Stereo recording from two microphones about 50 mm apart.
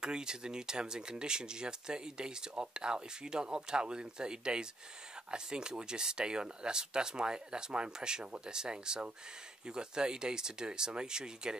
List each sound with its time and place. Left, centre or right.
0.0 s speech: centre